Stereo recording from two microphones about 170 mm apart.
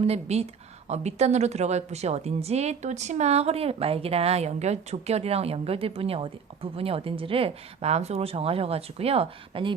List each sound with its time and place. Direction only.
0.0 s a woman's voice: 40° right (ahead or behind)